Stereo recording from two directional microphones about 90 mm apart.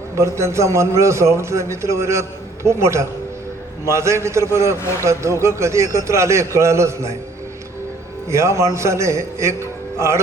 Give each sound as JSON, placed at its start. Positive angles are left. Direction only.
{"t": 0.2, "sound": "a man's voice", "side_deg": -30}
{"t": 8.3, "sound": "a man's voice", "side_deg": -30}